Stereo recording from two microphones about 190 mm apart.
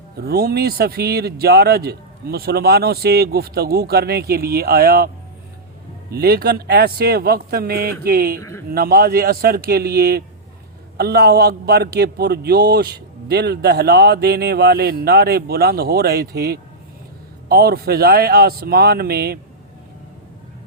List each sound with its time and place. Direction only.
0.2 s a man's voice: 55° right (ahead or behind)
8.4 s speech: 15° left (ahead or behind)
8.7 s a man's voice: 55° right (ahead or behind)